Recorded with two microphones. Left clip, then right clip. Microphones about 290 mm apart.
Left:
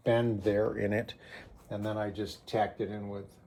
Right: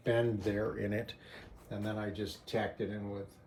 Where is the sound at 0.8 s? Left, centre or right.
Left.